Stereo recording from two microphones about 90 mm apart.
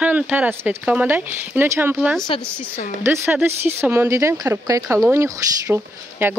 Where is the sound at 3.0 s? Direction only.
25° right (ahead or behind).